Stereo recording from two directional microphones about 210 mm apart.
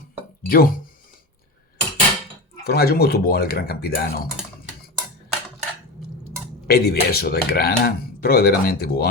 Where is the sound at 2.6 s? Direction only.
45° left (ahead or behind).